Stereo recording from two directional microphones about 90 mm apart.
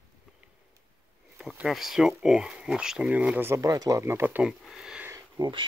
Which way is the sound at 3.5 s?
45° right (ahead or behind).